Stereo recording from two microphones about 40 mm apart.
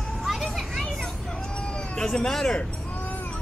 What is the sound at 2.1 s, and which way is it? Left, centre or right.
Speech, centre.